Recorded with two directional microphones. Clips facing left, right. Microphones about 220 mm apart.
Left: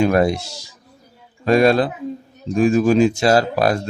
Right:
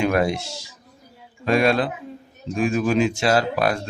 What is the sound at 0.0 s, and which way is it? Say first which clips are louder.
Speech: left 4 dB; 40° left (ahead or behind).